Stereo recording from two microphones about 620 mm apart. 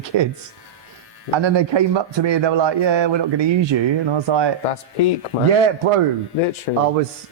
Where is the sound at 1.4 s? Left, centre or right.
Right.